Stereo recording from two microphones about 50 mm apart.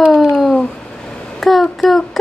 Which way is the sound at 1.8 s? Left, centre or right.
Centre.